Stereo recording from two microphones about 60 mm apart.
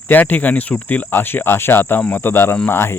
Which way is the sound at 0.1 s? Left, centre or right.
Left.